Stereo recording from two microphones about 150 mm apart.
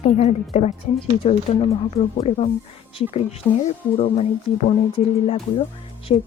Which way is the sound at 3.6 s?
45° left (ahead or behind).